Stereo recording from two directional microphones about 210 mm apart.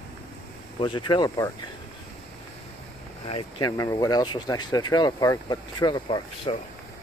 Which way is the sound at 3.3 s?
20° left (ahead or behind).